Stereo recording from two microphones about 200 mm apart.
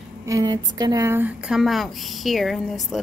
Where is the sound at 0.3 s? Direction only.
20° right (ahead or behind).